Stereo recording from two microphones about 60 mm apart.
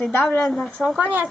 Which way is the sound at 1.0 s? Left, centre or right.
Right.